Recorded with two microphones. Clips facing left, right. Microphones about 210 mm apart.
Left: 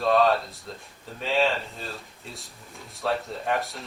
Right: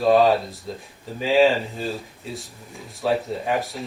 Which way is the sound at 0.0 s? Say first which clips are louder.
Right 5 dB; 5° right (ahead or behind).